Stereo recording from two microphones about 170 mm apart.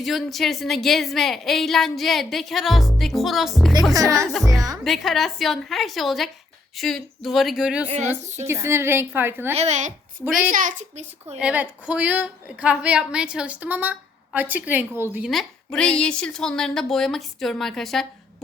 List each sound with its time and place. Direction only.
0.0 s a woman's voice: centre (ahead or behind)
4.8 s a woman's voice: centre (ahead or behind)
7.9 s a woman's voice: 40° right (ahead or behind)
8.4 s a woman's voice: 15° right (ahead or behind)
9.6 s a child's voice: 40° right (ahead or behind)
11.3 s a woman's voice: 10° right (ahead or behind)
15.3 s a woman's voice: centre (ahead or behind)